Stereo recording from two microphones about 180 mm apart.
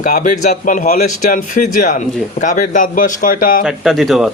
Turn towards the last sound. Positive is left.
turn(degrees=0)  # may be behind; listen again after turning